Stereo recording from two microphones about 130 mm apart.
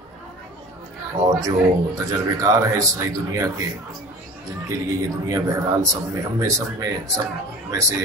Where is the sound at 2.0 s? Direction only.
25° right (ahead or behind).